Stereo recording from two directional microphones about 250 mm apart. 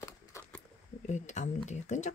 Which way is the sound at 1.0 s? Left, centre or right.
Left.